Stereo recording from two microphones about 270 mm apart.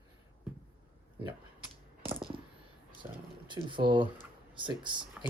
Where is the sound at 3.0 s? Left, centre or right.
Centre.